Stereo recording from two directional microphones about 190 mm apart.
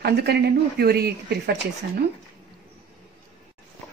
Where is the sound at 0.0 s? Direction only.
60° right (ahead or behind).